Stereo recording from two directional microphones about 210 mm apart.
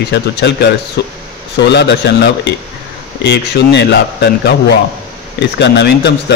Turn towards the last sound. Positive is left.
turn(degrees=55)  # may be behind; listen again after turning